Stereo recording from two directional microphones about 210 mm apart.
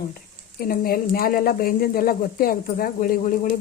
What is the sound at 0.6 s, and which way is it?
Speech, 45° left (ahead or behind).